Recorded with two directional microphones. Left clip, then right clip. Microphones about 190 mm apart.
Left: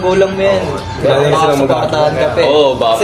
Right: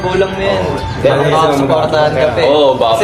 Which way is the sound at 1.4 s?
55° left (ahead or behind).